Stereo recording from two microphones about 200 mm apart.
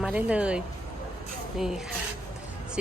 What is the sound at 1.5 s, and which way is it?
Rub, centre (ahead or behind).